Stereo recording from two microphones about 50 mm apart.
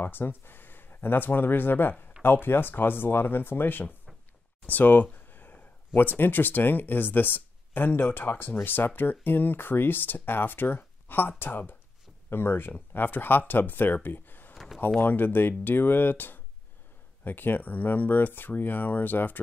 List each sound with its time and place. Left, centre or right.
0.0 s speech: left
4.6 s a sound: left
5.9 s speech: left